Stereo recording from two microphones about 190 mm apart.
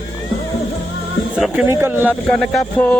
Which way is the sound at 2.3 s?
5° left (ahead or behind).